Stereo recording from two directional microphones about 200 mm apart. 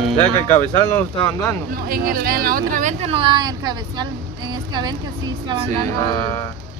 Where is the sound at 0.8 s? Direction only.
10° left (ahead or behind).